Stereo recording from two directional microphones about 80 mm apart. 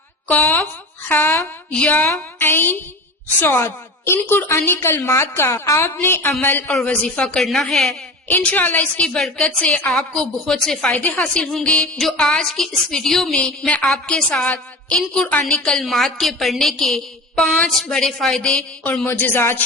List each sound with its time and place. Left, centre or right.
0.3 s speech: left
1.7 s a woman's voice: centre
2.4 s a woman's voice: left
7.4 s a woman's voice: centre
8.3 s a woman's voice: centre
10.9 s a woman's voice: centre
19.0 s a woman's voice: left